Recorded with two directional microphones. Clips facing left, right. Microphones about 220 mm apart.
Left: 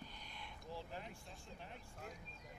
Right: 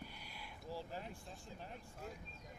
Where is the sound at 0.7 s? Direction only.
40° right (ahead or behind).